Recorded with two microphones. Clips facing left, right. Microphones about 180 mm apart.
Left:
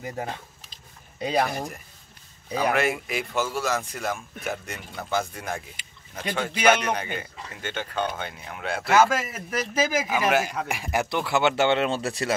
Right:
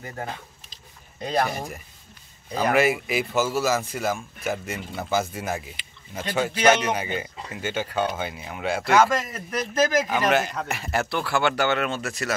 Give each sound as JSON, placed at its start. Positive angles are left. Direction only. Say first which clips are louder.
{"t": 0.0, "sound": "speech", "louder": "left 2 dB", "side_deg": 10}
{"t": 1.5, "sound": "speech", "louder": "even", "side_deg": 0}
{"t": 5.8, "sound": "a sound", "louder": "right 2 dB", "side_deg": 45}
{"t": 6.7, "sound": "speech", "louder": "left 1 dB", "side_deg": -10}